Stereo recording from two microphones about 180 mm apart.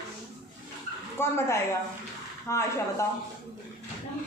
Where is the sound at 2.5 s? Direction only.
15° left (ahead or behind).